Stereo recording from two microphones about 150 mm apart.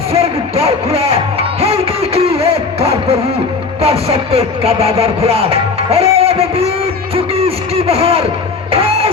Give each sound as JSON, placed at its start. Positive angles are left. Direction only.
{"t": 0.1, "sound": "music", "side_deg": -40}
{"t": 7.3, "sound": "a sound", "side_deg": -40}
{"t": 8.7, "sound": "music", "side_deg": -40}